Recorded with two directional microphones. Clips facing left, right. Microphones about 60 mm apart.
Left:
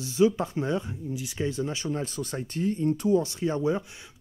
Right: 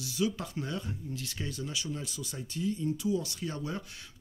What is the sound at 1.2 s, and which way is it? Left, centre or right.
Speech, centre.